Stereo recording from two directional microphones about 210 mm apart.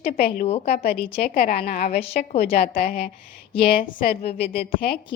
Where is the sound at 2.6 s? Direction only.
45° left (ahead or behind).